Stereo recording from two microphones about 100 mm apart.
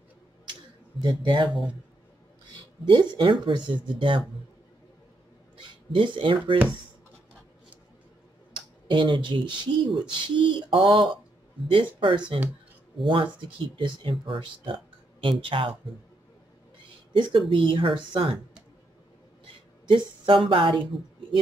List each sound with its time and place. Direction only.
1.0 s speech: 50° right (ahead or behind)
2.9 s speech: 50° right (ahead or behind)
5.6 s speech: 55° right (ahead or behind)
8.5 s speech: 55° right (ahead or behind)
17.1 s speech: 55° right (ahead or behind)
19.4 s a sound: 55° right (ahead or behind)